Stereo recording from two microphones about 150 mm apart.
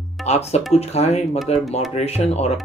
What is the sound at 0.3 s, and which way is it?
Speech, 45° left (ahead or behind).